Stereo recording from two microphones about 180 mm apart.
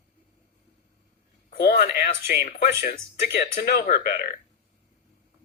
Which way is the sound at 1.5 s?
60° left (ahead or behind).